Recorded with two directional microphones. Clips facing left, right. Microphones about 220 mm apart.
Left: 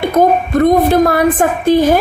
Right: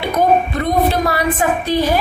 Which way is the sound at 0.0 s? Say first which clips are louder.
Left 3 dB; 50° left (ahead or behind).